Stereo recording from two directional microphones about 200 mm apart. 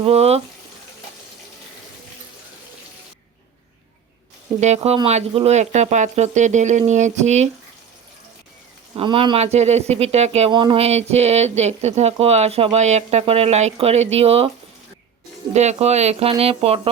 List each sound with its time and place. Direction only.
0.0 s speech: 30° right (ahead or behind)
4.6 s speech: 30° right (ahead or behind)
9.0 s speech: 25° right (ahead or behind)
15.5 s speech: 35° right (ahead or behind)